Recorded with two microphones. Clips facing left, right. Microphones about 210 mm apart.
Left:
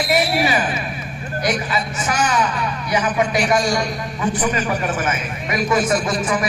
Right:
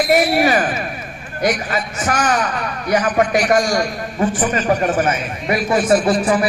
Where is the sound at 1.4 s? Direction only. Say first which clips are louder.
Right 3 dB; 55° right (ahead or behind).